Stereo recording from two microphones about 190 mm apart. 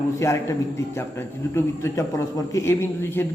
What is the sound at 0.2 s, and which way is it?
Speech, 15° left (ahead or behind).